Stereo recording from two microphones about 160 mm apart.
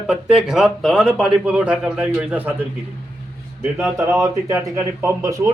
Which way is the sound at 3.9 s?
15° right (ahead or behind).